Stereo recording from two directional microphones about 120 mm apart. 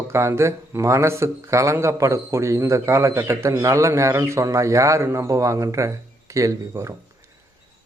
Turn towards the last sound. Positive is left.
turn(degrees=-25)  # may be behind; listen again after turning